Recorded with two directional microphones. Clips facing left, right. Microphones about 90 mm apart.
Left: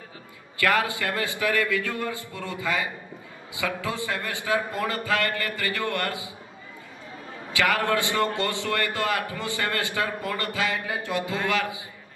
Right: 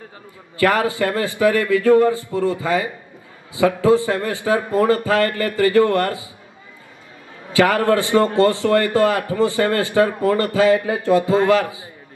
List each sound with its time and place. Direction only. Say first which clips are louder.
0.6 s a man's voice: right 7 dB; 35° right (ahead or behind)
7.5 s a man's voice: right 8 dB; 35° right (ahead or behind)